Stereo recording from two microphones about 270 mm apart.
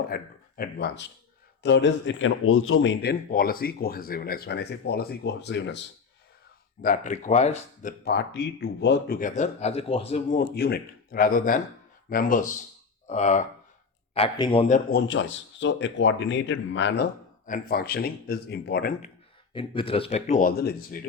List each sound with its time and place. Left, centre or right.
0.1 s a man's voice: left
6.8 s speech: left
14.9 s a man's voice: left
19.5 s speech: centre; by 21.1 s left